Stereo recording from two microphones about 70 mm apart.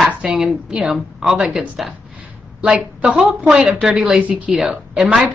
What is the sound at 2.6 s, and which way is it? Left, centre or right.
A woman's voice, centre.